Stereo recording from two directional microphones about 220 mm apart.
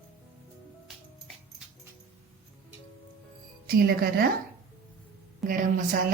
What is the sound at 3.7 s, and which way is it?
Speech, 40° right (ahead or behind).